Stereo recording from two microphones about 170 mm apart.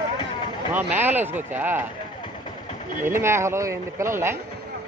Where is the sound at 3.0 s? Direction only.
15° right (ahead or behind).